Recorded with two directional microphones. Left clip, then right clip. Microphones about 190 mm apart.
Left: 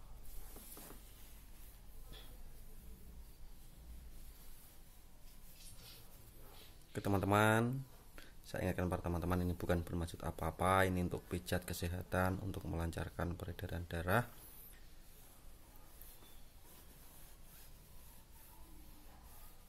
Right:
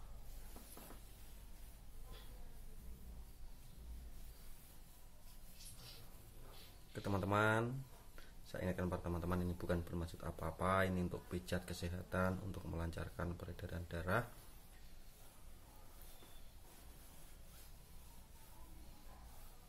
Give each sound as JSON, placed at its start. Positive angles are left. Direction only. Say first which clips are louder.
{"t": 6.9, "sound": "speech", "louder": "left 5 dB", "side_deg": 45}